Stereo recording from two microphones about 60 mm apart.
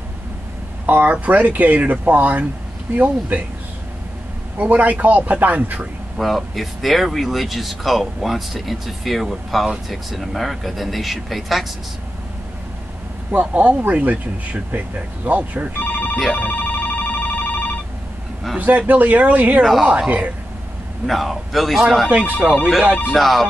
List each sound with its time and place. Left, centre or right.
0.8 s speech: right
4.6 s speech: right
6.1 s speech: centre
13.3 s speech: right
15.8 s speech: left
16.3 s ringtone: left
18.6 s speech: right
19.6 s speech: centre
20.1 s speech: right
21.1 s speech: centre
22.4 s speech: centre
23.1 s speech: centre